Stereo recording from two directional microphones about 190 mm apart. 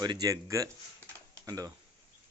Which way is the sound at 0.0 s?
20° right (ahead or behind).